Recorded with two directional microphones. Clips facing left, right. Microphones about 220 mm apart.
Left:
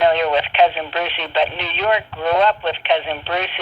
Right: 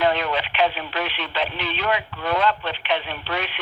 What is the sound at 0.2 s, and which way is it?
Radio, 20° left (ahead or behind).